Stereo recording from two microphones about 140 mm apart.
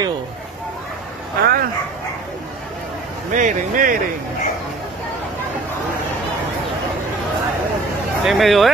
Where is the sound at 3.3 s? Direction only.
65° right (ahead or behind).